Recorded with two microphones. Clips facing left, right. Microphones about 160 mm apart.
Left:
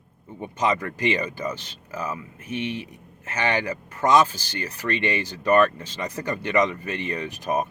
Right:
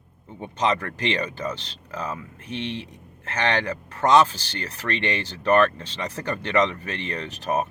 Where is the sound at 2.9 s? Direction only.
10° left (ahead or behind).